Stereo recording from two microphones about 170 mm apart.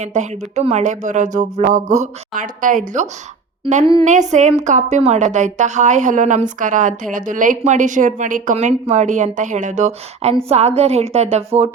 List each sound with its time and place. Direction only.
0.0 s a woman's voice: 45° right (ahead or behind)